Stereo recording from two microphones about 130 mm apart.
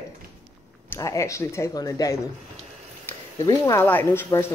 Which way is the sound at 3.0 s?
25° left (ahead or behind).